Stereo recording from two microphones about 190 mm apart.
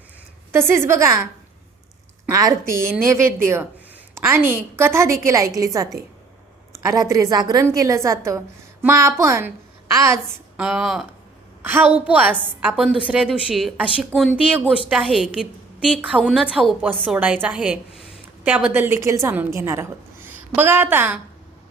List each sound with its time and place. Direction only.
0.5 s a woman's voice: 15° right (ahead or behind)
2.2 s a woman's voice: 15° right (ahead or behind)
10.6 s a woman's voice: 5° right (ahead or behind)